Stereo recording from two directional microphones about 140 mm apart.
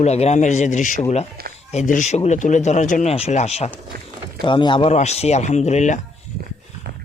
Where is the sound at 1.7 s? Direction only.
60° left (ahead or behind).